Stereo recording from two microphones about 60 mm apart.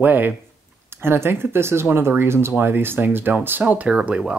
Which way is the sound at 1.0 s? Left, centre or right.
Right.